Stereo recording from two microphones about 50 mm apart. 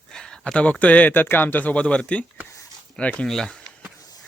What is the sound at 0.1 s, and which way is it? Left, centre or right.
Speech, centre.